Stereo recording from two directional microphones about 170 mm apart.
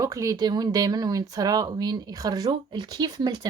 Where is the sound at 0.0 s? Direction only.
20° right (ahead or behind).